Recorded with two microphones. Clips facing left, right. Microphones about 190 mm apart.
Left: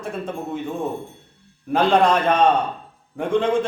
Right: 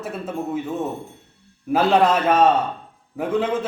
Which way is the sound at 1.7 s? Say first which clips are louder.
Even; 5° right (ahead or behind).